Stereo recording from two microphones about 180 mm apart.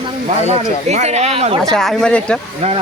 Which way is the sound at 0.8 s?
40° right (ahead or behind).